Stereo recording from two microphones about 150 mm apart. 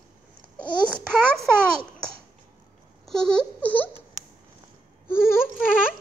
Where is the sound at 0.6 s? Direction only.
5° left (ahead or behind).